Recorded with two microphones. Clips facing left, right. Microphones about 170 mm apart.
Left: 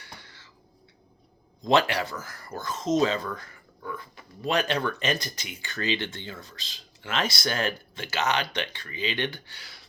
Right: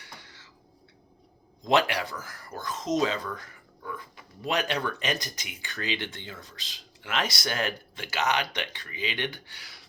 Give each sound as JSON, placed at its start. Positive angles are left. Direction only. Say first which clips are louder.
{"t": 1.7, "sound": "speech", "louder": "left 1 dB", "side_deg": -15}
{"t": 4.4, "sound": "speech", "louder": "left 2 dB", "side_deg": -15}